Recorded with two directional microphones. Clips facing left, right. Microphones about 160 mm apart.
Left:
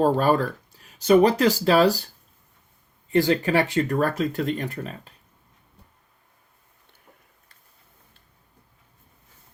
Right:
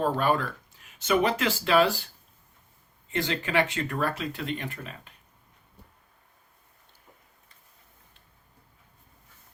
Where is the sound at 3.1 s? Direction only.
35° left (ahead or behind).